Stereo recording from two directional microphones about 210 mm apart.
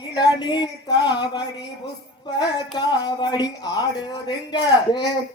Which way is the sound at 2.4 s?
20° left (ahead or behind).